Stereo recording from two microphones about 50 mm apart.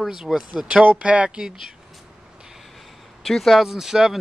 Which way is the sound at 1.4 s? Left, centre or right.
Centre.